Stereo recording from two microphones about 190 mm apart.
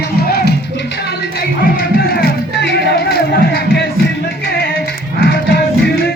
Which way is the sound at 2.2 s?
55° left (ahead or behind).